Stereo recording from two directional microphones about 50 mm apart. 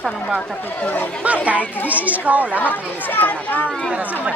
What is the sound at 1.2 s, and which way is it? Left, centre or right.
Speech, right.